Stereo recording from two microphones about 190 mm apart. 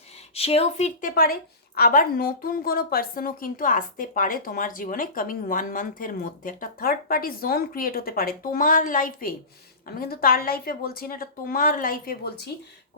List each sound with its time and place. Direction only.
0.3 s speech: 30° left (ahead or behind)
1.1 s a woman's voice: 50° left (ahead or behind)